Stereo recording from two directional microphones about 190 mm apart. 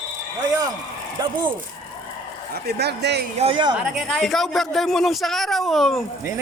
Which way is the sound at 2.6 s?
60° right (ahead or behind).